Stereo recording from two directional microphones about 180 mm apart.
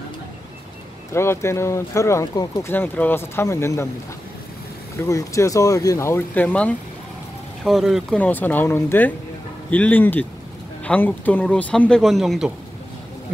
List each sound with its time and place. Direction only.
1.1 s speech: 15° left (ahead or behind)
4.9 s speech: 15° left (ahead or behind); by 8.2 s centre (ahead or behind)
8.2 s speech: 10° left (ahead or behind)